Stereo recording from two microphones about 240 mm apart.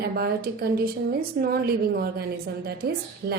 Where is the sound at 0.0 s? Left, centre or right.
Right.